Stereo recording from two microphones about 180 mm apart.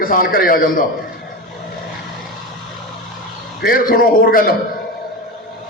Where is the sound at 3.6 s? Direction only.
55° left (ahead or behind).